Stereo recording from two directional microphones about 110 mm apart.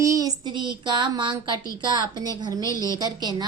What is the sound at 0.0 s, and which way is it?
Child singing, 30° right (ahead or behind).